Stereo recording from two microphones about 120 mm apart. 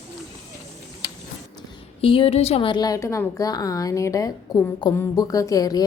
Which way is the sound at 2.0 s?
50° left (ahead or behind).